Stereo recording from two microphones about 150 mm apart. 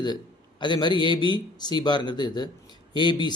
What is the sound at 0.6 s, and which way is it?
Speech, 30° left (ahead or behind).